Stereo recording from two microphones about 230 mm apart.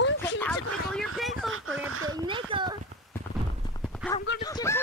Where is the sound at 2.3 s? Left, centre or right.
Right.